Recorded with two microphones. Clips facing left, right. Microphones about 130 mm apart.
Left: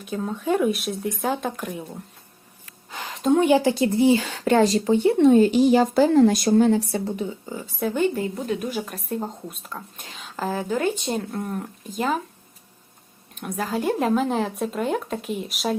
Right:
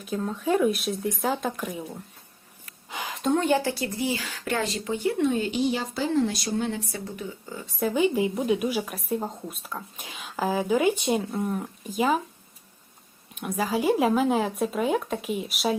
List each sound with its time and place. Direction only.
0.0 s speech: centre (ahead or behind)
2.9 s a sound: 5° right (ahead or behind)
3.4 s a woman's voice: 15° left (ahead or behind); by 6.7 s 50° left (ahead or behind)
6.7 s speech: 30° left (ahead or behind)
7.8 s a woman's voice: 5° right (ahead or behind)
13.3 s speech: 5° right (ahead or behind)